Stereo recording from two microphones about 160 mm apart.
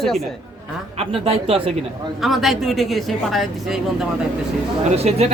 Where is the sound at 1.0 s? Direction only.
35° right (ahead or behind).